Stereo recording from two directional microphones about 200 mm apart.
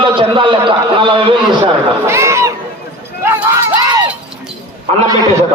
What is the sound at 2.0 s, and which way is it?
Speech, 15° right (ahead or behind).